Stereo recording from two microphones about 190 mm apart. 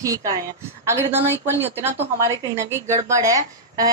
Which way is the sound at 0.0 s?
15° right (ahead or behind).